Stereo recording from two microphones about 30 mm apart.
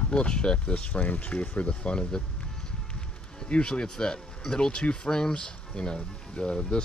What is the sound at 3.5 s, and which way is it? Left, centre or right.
Speech, left.